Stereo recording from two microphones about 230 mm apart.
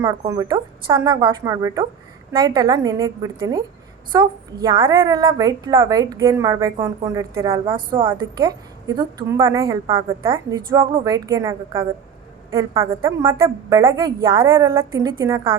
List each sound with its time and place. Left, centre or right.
0.0 s a woman's voice: centre
9.0 s a woman's voice: centre